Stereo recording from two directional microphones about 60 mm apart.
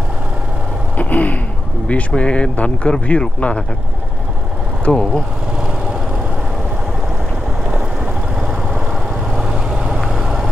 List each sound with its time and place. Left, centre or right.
0.9 s speech: left
4.8 s speech: centre
9.3 s vehicle: centre